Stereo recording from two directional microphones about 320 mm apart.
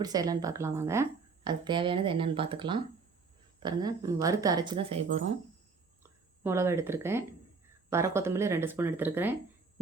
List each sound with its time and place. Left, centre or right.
0.0 s speech: centre
6.0 s speech: centre